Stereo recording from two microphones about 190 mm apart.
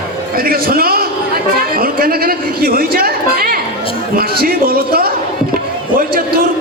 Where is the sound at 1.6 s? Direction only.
50° right (ahead or behind).